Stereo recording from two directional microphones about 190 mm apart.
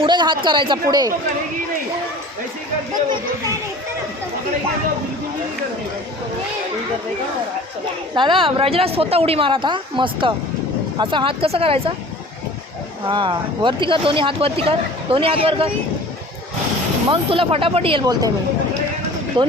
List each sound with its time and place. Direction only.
0.0 s speech: 25° right (ahead or behind)
8.1 s speech: 25° right (ahead or behind)
13.1 s speech: 25° right (ahead or behind)
17.1 s speech: 30° right (ahead or behind)
19.4 s speech: 25° right (ahead or behind)